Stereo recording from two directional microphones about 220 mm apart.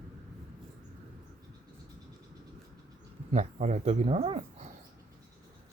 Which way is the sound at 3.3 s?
30° right (ahead or behind).